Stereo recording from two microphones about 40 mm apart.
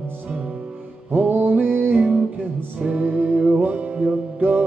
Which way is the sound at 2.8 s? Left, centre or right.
Right.